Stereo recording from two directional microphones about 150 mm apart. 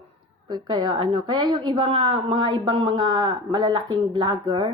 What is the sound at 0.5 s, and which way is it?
A woman's voice, 25° right (ahead or behind).